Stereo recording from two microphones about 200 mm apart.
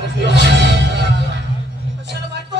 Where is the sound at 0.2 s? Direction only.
60° right (ahead or behind).